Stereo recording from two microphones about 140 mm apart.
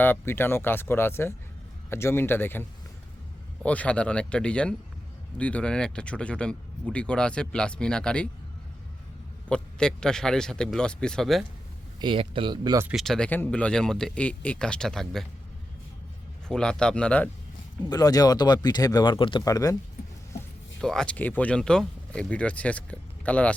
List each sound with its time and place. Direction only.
0.0 s speech: 15° left (ahead or behind)
9.5 s speech: 5° left (ahead or behind)
11.9 s speech: 35° right (ahead or behind)
12.9 s speech: centre (ahead or behind)
16.5 s speech: 5° left (ahead or behind)
17.8 s speech: 25° left (ahead or behind)
20.8 s speech: 5° left (ahead or behind)